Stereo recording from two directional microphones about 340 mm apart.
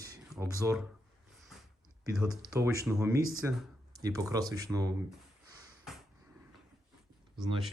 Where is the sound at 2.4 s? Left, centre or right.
Centre.